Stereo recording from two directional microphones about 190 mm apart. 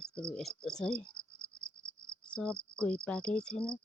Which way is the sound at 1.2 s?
15° right (ahead or behind).